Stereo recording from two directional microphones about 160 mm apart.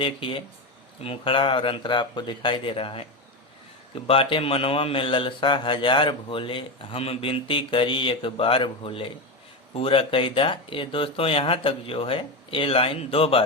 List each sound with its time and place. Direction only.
0.0 s speech: 35° left (ahead or behind)